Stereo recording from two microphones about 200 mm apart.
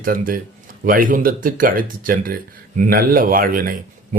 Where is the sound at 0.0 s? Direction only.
45° right (ahead or behind).